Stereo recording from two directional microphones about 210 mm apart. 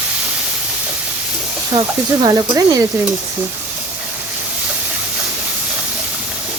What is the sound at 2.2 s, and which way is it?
Speech, 15° right (ahead or behind).